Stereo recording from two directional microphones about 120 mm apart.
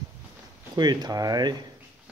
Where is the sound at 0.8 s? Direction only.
35° right (ahead or behind).